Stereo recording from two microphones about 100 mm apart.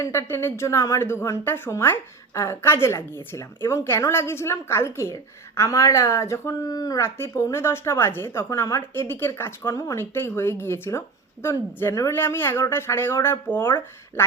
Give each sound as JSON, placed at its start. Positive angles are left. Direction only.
{"t": 0.0, "sound": "a woman's voice", "side_deg": 25}